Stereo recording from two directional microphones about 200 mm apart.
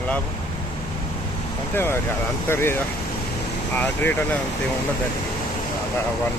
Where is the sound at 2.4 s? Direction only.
10° left (ahead or behind).